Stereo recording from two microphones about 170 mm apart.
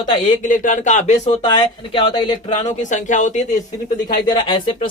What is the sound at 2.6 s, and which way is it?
Speech, 45° left (ahead or behind).